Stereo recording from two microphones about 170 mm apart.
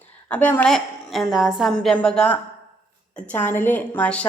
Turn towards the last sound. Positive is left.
turn(degrees=10)  # may be behind; listen again after turning